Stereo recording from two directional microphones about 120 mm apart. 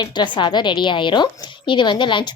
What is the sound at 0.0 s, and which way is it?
A woman's voice, 40° left (ahead or behind).